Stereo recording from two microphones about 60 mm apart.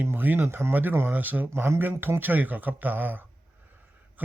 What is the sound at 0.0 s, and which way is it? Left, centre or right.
Speech, right.